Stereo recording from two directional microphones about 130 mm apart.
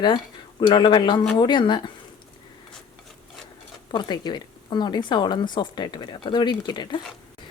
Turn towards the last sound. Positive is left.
turn(degrees=35)  # may be behind; listen again after turning